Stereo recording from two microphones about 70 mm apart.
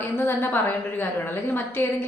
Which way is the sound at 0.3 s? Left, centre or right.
Left.